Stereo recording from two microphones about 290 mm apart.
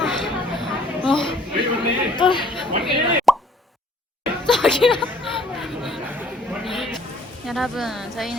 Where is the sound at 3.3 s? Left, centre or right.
Centre.